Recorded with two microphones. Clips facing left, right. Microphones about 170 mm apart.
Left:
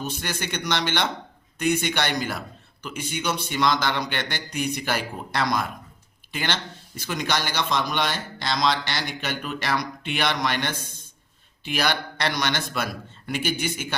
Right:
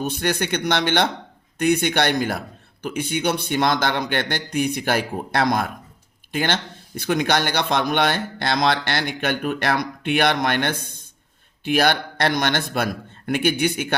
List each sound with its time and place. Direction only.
0.0 s a man's voice: 55° right (ahead or behind)